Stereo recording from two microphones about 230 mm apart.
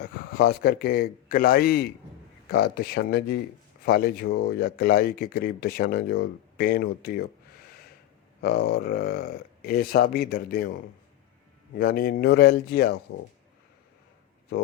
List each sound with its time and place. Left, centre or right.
0.0 s speech: left
8.4 s speech: left
11.8 s a man's voice: left
14.5 s a man's voice: left